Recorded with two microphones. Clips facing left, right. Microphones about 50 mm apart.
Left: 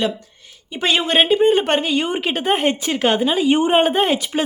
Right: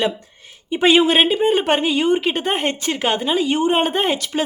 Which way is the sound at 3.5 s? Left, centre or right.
Centre.